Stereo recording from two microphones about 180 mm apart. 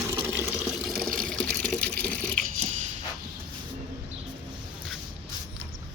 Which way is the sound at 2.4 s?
45° right (ahead or behind).